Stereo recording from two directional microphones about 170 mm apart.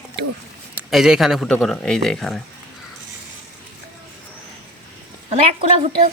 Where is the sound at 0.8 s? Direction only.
5° right (ahead or behind).